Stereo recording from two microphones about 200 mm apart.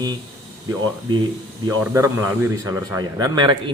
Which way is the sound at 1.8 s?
10° right (ahead or behind).